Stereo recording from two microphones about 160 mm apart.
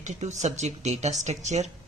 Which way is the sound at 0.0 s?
45° right (ahead or behind).